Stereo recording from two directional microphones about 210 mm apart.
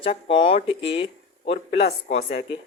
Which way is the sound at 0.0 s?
25° left (ahead or behind).